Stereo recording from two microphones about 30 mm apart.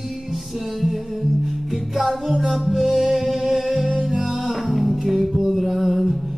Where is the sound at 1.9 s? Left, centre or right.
Centre.